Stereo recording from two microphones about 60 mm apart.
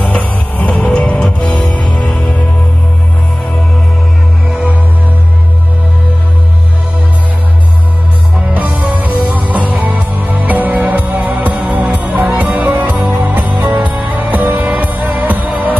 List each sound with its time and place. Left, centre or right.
0.0 s music: left
2.0 s music: centre
4.5 s music: centre
8.9 s music: right